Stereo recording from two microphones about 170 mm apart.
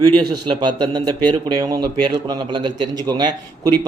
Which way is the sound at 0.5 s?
25° right (ahead or behind).